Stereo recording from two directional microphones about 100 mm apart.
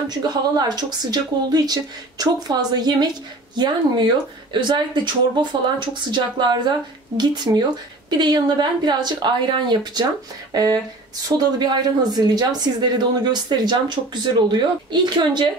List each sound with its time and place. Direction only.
0.1 s speech: 45° right (ahead or behind)
4.5 s a woman's voice: 50° right (ahead or behind)